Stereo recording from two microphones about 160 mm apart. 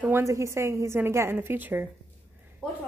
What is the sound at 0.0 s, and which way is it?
A woman's voice, 15° right (ahead or behind).